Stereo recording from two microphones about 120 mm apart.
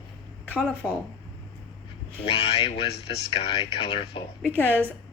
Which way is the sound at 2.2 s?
50° left (ahead or behind).